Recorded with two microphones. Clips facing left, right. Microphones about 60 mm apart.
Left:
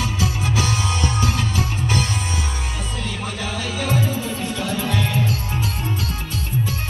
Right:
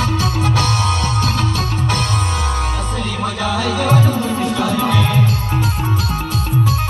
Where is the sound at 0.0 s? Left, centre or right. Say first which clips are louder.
Right 5 dB; right.